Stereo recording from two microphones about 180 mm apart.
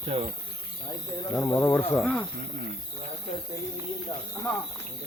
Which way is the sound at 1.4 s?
15° left (ahead or behind).